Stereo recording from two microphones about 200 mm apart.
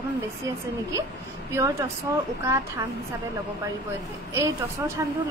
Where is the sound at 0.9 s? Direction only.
15° right (ahead or behind).